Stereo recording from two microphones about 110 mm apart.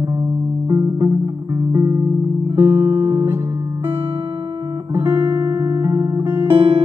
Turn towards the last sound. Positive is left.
turn(degrees=-20)  # may be behind; listen again after turning